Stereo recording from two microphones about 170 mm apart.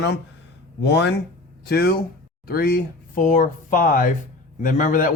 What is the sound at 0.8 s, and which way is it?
Speech, 85° left.